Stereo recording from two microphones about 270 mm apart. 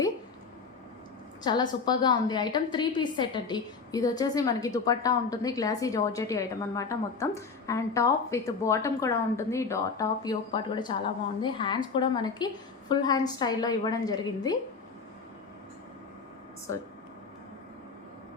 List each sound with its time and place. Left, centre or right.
1.5 s a woman's voice: centre